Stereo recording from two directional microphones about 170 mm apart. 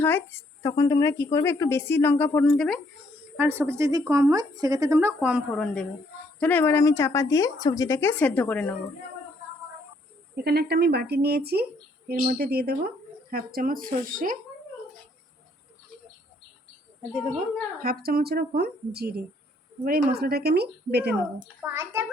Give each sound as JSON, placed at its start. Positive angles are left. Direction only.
{"t": 0.0, "sound": "a woman's voice", "side_deg": 15}
{"t": 3.3, "sound": "speech", "side_deg": -10}
{"t": 5.5, "sound": "a woman's voice", "side_deg": 5}
{"t": 10.4, "sound": "speech", "side_deg": -70}
{"t": 17.7, "sound": "speech", "side_deg": -60}
{"t": 21.4, "sound": "speech", "side_deg": -10}